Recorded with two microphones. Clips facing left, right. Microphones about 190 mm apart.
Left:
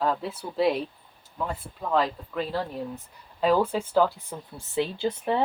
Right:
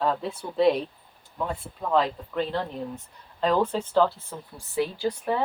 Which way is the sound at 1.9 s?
5° left (ahead or behind).